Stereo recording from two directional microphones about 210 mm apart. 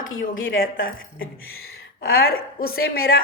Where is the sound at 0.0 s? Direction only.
65° left (ahead or behind).